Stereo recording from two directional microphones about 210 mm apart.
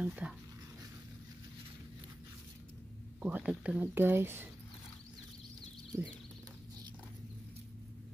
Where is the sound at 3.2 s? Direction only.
5° right (ahead or behind).